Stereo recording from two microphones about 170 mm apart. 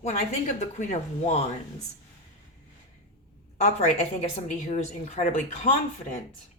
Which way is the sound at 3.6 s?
40° left (ahead or behind).